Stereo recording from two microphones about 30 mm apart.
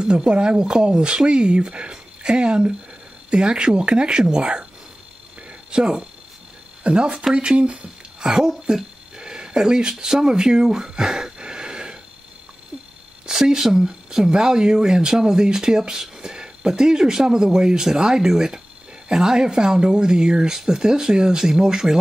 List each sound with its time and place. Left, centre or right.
0.0 s speech: right
5.7 s speech: right
6.8 s speech: right
8.2 s a sound: centre
13.3 s speech: centre